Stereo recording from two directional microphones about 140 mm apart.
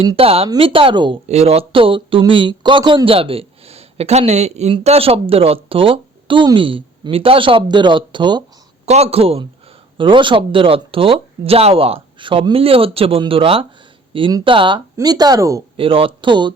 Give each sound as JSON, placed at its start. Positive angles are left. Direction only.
{"t": 0.2, "sound": "a man's voice", "side_deg": -45}
{"t": 1.3, "sound": "speech", "side_deg": -45}
{"t": 8.9, "sound": "a man's voice", "side_deg": -45}
{"t": 15.8, "sound": "speech", "side_deg": -40}